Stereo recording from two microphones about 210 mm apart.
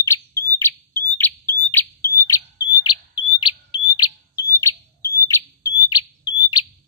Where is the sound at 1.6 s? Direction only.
10° left (ahead or behind).